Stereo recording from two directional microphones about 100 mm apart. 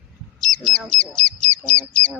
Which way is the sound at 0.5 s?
5° left (ahead or behind).